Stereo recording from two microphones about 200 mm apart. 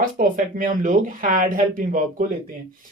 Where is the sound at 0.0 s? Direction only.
45° right (ahead or behind).